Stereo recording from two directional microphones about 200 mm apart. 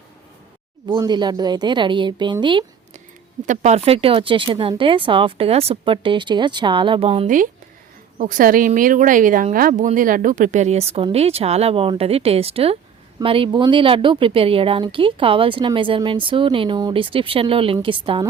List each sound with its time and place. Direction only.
0.9 s speech: 20° right (ahead or behind)
3.4 s speech: 40° right (ahead or behind)
8.2 s speech: 45° right (ahead or behind); by 18.3 s 25° right (ahead or behind)